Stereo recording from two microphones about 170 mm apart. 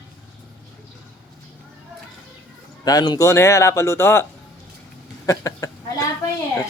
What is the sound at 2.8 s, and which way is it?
Speech, 25° left (ahead or behind).